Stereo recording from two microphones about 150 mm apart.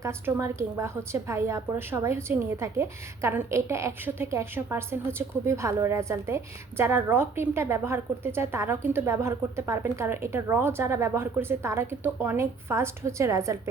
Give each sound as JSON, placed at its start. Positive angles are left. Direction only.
{"t": 0.0, "sound": "a woman's voice", "side_deg": -20}